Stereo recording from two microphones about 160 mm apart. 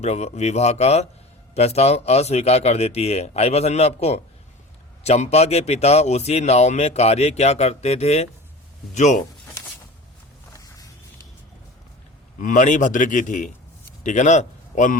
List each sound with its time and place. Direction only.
0.0 s speech: 45° left (ahead or behind)
10.5 s a sound: 20° left (ahead or behind)
12.4 s a man's voice: 55° left (ahead or behind)